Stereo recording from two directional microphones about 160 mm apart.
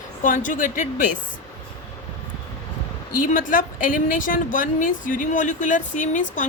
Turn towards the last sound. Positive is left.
turn(degrees=50)  # may be behind; listen again after turning